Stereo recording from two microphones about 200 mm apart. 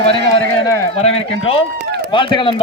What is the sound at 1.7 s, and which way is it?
Run, 55° right (ahead or behind).